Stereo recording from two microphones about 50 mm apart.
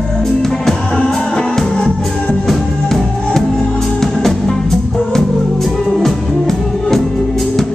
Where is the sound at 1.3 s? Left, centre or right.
Centre.